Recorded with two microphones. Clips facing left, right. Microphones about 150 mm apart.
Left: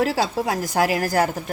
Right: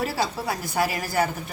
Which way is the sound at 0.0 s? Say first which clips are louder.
Left 5 dB; 90° left.